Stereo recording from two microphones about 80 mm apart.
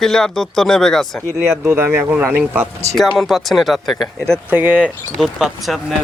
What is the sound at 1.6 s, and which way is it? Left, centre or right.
Speech, right.